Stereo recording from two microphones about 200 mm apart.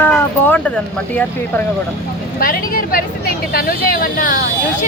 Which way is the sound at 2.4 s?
45° left (ahead or behind).